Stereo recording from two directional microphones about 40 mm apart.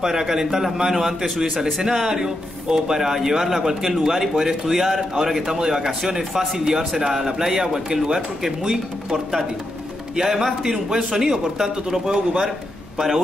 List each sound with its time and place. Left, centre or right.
0.0 s a man's voice: centre
5.6 s a man's voice: centre